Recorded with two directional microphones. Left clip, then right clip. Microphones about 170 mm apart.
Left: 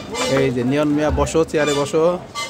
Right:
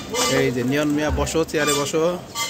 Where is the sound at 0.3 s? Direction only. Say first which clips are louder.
Left 4 dB; 5° left (ahead or behind).